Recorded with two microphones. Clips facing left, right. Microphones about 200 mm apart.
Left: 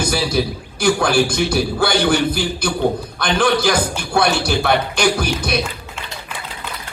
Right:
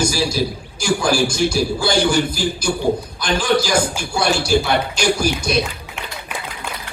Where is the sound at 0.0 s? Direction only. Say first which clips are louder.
Even; 60° left (ahead or behind).